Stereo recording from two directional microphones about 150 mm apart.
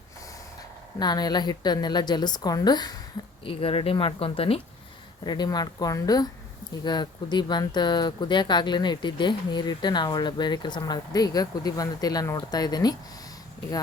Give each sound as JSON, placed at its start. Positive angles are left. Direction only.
{"t": 0.9, "sound": "speech", "side_deg": 25}
{"t": 3.4, "sound": "speech", "side_deg": 40}
{"t": 5.2, "sound": "speech", "side_deg": 25}